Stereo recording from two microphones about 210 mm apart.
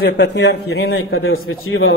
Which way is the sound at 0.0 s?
55° left (ahead or behind).